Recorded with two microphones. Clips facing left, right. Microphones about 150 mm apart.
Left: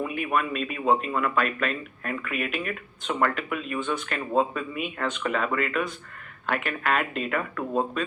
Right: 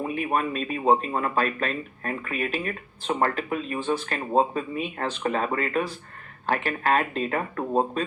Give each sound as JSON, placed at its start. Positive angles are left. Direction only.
{"t": 0.0, "sound": "speech", "side_deg": -35}